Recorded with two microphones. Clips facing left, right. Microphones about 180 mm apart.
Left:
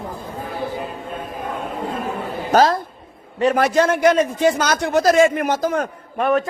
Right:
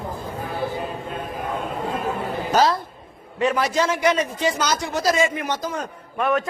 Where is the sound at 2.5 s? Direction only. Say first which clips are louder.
Left 4 dB; 50° left (ahead or behind).